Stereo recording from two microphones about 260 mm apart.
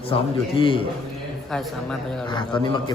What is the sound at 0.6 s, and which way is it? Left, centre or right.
Speech, centre.